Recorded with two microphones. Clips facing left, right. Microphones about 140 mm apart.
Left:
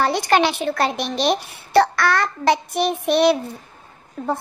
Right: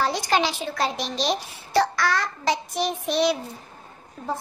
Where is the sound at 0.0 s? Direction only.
60° left (ahead or behind).